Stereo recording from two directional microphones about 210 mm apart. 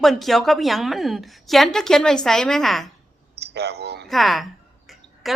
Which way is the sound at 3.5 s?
50° right (ahead or behind).